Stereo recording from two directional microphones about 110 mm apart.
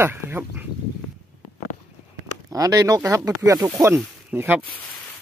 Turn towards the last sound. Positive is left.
turn(degrees=-20)  # may be behind; listen again after turning